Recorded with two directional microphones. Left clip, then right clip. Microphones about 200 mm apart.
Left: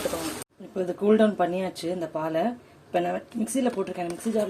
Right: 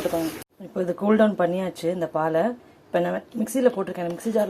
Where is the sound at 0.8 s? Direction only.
10° right (ahead or behind).